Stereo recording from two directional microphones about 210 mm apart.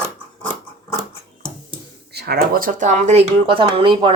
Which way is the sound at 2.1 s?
50° right (ahead or behind).